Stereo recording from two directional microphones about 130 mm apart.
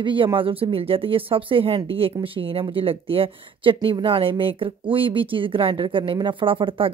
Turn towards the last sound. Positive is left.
turn(degrees=-40)  # may be behind; listen again after turning